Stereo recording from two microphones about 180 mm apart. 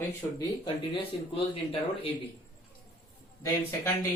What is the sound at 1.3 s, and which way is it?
Speech, 30° left (ahead or behind).